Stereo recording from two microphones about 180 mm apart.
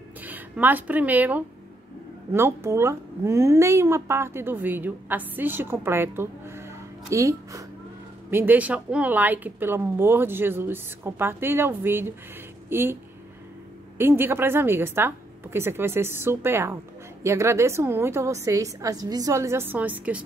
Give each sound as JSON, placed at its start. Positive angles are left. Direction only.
{"t": 0.2, "sound": "a woman's voice", "side_deg": -10}
{"t": 13.9, "sound": "a woman's voice", "side_deg": -10}